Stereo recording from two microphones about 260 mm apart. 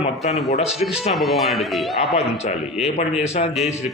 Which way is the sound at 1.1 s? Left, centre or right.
Centre.